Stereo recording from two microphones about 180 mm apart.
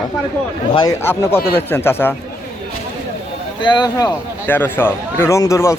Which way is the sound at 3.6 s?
25° left (ahead or behind).